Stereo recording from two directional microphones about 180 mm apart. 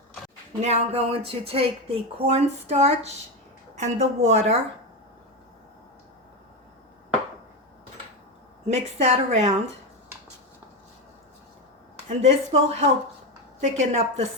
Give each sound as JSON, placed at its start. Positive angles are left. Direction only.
{"t": 0.6, "sound": "a woman's voice", "side_deg": -35}
{"t": 8.6, "sound": "a woman's voice", "side_deg": -40}
{"t": 12.0, "sound": "a woman's voice", "side_deg": -35}